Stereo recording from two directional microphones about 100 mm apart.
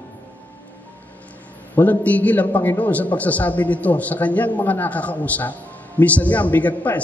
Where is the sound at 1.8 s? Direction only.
15° left (ahead or behind).